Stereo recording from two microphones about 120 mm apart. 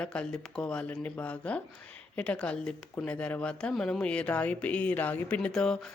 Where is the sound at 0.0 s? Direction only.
10° left (ahead or behind).